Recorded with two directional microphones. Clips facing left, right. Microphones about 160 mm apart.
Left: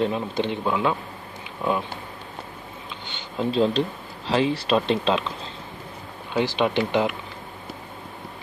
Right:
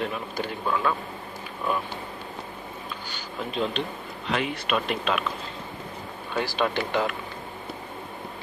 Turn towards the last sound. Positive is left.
turn(degrees=20)  # may be behind; listen again after turning